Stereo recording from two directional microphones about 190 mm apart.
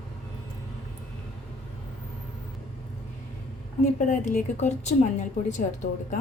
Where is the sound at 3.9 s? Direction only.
40° left (ahead or behind).